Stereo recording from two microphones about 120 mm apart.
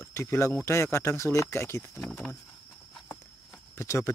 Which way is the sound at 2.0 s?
5° left (ahead or behind).